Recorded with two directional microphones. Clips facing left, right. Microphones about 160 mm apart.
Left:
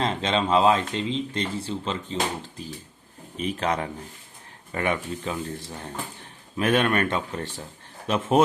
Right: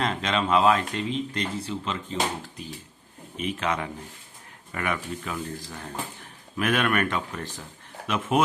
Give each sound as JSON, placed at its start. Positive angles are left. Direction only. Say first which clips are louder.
{"t": 0.0, "sound": "speech", "louder": "left 2 dB", "side_deg": 25}
{"t": 3.3, "sound": "speech", "louder": "left 2 dB", "side_deg": 35}